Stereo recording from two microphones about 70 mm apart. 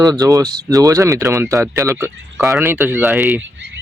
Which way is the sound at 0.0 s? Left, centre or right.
Right.